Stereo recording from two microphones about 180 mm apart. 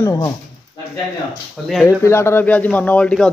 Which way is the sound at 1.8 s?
15° left (ahead or behind).